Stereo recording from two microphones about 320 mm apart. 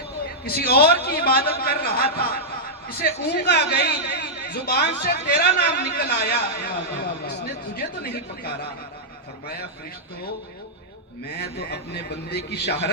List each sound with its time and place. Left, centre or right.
0.4 s a man's voice: left
11.3 s a man's voice: left